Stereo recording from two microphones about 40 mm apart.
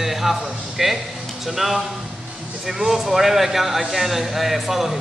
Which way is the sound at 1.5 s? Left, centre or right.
Centre.